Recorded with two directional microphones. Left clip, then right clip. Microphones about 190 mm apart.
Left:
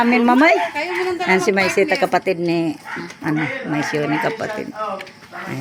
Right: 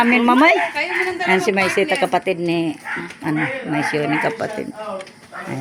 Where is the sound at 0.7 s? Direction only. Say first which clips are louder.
Right 1 dB; 55° left (ahead or behind).